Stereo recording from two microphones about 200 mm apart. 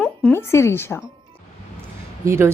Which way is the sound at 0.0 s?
10° left (ahead or behind).